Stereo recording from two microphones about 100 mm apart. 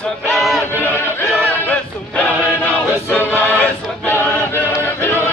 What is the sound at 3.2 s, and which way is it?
Choir, 15° left (ahead or behind).